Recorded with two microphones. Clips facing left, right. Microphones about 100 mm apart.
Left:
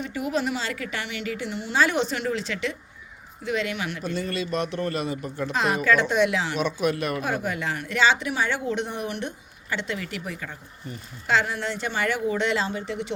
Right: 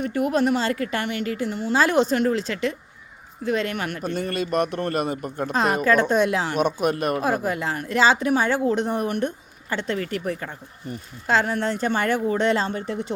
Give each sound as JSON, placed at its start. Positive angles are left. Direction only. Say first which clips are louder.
{"t": 0.0, "sound": "speech", "louder": "right 5 dB", "side_deg": -50}
{"t": 3.4, "sound": "speech", "louder": "right 3 dB", "side_deg": -40}